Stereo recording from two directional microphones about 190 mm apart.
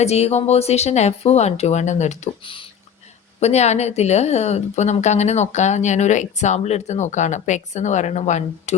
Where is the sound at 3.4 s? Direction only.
35° left (ahead or behind).